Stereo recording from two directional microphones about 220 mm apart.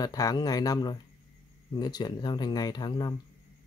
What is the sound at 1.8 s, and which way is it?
Speech, 20° left (ahead or behind).